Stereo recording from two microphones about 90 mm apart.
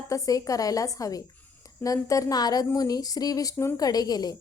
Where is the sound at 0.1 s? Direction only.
40° left (ahead or behind).